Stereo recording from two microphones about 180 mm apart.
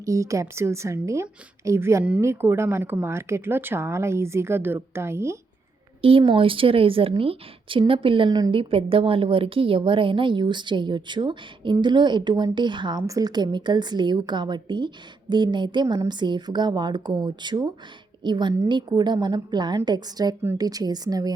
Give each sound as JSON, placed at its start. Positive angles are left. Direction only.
{"t": 0.0, "sound": "a woman's voice", "side_deg": -15}
{"t": 6.0, "sound": "a woman's voice", "side_deg": -30}